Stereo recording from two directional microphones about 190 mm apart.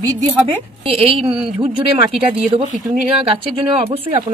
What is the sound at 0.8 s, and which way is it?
Speech, 30° right (ahead or behind).